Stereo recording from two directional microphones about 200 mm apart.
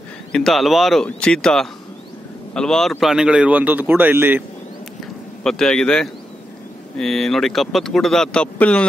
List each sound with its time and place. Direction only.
0.3 s a man's voice: centre (ahead or behind)
5.4 s speech: 5° left (ahead or behind)